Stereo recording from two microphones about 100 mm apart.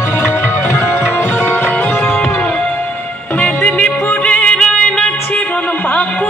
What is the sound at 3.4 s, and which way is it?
Music, 15° left (ahead or behind).